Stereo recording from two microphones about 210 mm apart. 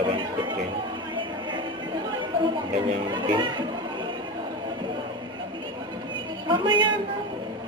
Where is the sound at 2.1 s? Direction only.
20° right (ahead or behind).